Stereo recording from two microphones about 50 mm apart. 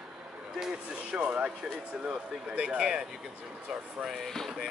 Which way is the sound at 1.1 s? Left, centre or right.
Right.